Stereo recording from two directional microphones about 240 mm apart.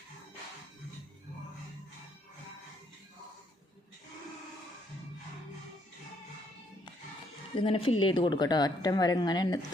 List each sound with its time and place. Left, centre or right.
7.5 s a woman's voice: left